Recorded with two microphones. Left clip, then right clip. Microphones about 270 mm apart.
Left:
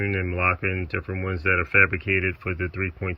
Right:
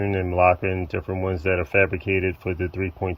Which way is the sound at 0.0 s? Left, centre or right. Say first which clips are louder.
Right 5 dB; centre.